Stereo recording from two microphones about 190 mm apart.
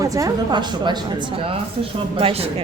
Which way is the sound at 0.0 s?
20° right (ahead or behind).